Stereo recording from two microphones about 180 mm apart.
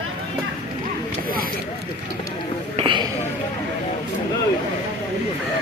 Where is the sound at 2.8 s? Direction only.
25° right (ahead or behind).